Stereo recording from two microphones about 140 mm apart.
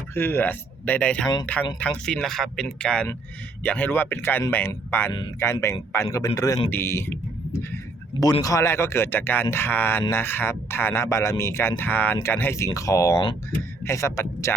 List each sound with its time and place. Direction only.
0.1 s speech: 15° left (ahead or behind)
8.2 s speech: 25° left (ahead or behind)